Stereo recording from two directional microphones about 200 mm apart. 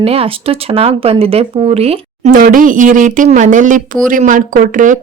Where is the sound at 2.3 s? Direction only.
45° right (ahead or behind).